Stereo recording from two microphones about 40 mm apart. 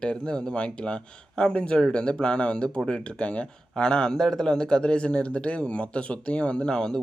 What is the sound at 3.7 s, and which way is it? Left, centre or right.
Speech, centre.